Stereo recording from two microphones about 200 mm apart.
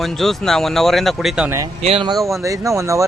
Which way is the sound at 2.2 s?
15° right (ahead or behind).